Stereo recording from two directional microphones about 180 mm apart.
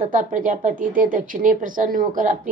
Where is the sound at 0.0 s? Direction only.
45° right (ahead or behind).